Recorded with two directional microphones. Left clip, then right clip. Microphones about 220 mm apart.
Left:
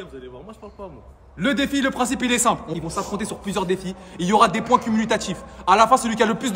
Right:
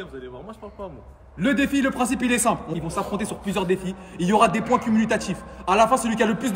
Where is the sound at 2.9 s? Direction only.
5° left (ahead or behind).